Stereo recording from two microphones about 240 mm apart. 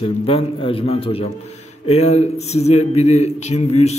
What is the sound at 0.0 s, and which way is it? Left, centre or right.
Speech, left.